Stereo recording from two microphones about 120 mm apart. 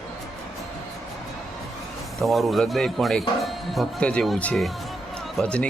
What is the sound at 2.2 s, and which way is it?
Speech, centre (ahead or behind).